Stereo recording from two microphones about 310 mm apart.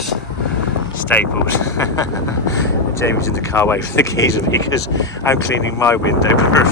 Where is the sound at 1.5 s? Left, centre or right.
Centre.